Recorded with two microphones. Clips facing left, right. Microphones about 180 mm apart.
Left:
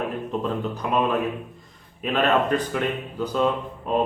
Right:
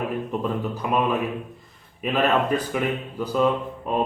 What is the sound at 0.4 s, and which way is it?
Speech, 5° right (ahead or behind).